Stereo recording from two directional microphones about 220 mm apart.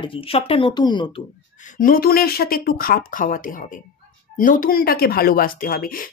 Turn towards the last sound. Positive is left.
turn(degrees=40)  # may be behind; listen again after turning